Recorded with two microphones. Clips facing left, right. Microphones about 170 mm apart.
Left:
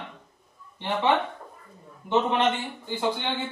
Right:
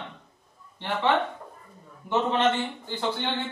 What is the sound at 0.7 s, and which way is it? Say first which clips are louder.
A man's voice: left 1 dB; 15° left (ahead or behind).